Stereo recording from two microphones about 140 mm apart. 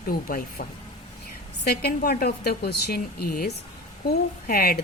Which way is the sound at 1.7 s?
90° left.